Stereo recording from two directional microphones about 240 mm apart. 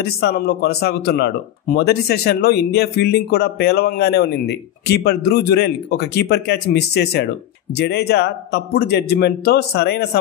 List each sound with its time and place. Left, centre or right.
0.0 s speech: left